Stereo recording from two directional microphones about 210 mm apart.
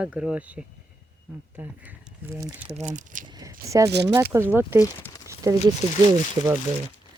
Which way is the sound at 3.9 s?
55° right (ahead or behind).